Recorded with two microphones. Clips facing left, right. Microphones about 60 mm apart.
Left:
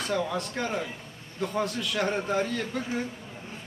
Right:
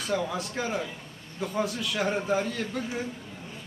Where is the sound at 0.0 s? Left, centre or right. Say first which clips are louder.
Left 1 dB; centre.